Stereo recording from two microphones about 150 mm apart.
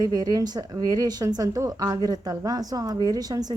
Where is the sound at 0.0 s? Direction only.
25° right (ahead or behind).